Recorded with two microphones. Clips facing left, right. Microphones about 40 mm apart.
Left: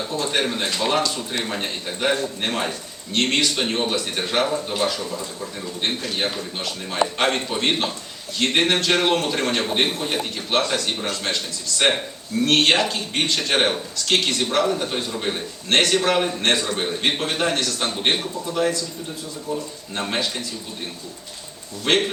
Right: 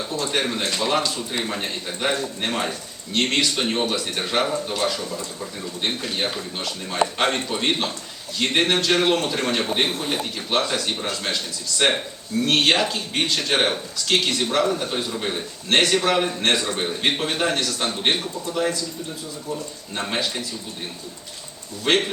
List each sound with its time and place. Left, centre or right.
0.0 s speech: centre
12.4 s speech: centre
20.0 s speech: centre
21.8 s speech: centre